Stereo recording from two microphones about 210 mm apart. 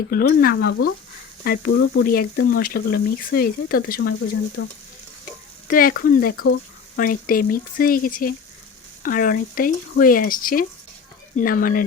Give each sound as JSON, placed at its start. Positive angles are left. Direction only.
{"t": 0.1, "sound": "speech", "side_deg": 45}
{"t": 4.6, "sound": "frying", "side_deg": 60}
{"t": 5.2, "sound": "stir", "side_deg": 40}
{"t": 6.9, "sound": "speech", "side_deg": 40}